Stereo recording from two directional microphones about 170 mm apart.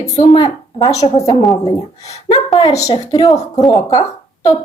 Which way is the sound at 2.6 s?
20° left (ahead or behind).